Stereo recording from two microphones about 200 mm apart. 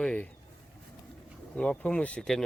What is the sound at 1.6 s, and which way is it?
Speech, 5° left (ahead or behind).